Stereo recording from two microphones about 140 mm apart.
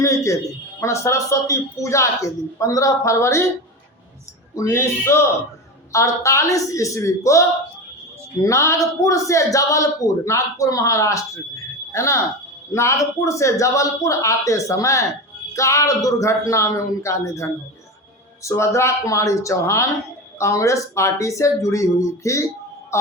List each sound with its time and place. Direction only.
0.0 s a man's voice: 20° left (ahead or behind)
4.5 s a woman's voice: 20° left (ahead or behind)